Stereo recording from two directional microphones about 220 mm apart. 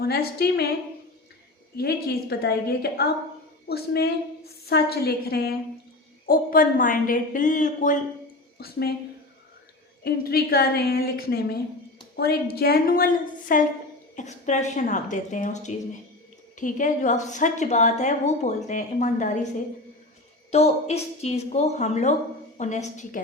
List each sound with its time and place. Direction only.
0.0 s a woman's voice: 45° left (ahead or behind)
1.7 s a woman's voice: 45° left (ahead or behind)
8.5 s a woman's voice: 45° left (ahead or behind)
10.0 s a woman's voice: 45° left (ahead or behind)
20.5 s a woman's voice: 30° left (ahead or behind)